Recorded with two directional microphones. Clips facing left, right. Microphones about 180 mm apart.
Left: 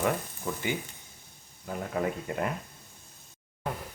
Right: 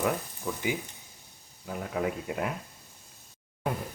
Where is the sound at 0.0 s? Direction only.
Centre (ahead or behind).